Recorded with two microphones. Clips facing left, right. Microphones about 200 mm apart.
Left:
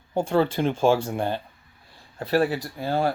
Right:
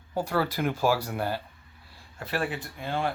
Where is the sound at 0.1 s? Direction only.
25° left (ahead or behind).